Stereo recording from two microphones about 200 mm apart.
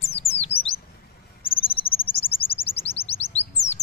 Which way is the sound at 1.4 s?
25° left (ahead or behind).